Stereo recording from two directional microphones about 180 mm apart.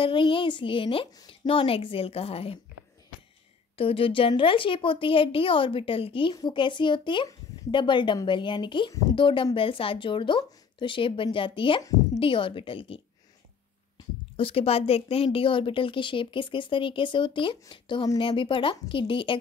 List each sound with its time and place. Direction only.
0.0 s a woman's voice: 30° left (ahead or behind)
3.7 s a woman's voice: 30° left (ahead or behind)